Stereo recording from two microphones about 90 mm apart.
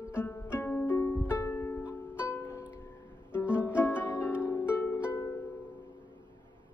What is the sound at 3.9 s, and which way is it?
Harp, 25° left (ahead or behind).